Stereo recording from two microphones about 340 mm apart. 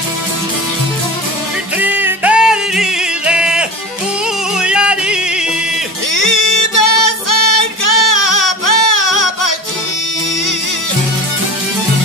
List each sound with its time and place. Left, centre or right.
1.8 s music: centre
4.6 s yodeling: centre
6.1 s music: left